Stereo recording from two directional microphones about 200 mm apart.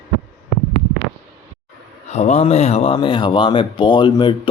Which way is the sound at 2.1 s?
35° left (ahead or behind).